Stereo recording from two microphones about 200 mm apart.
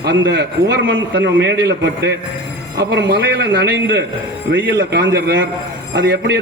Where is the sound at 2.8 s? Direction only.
55° right (ahead or behind).